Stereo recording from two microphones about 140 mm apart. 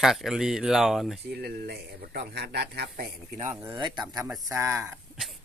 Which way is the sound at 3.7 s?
30° right (ahead or behind).